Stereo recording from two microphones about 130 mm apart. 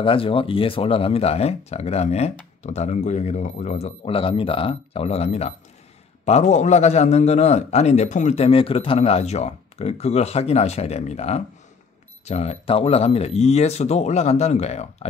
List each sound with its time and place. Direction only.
0.0 s speech: 45° left (ahead or behind); by 8.4 s 65° left (ahead or behind)
8.4 s speech: 45° left (ahead or behind)